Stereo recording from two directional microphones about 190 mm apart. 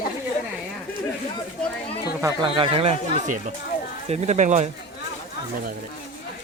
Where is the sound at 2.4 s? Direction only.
25° right (ahead or behind).